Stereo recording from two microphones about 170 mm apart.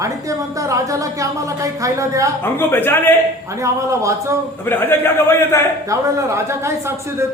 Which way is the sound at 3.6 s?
20° right (ahead or behind).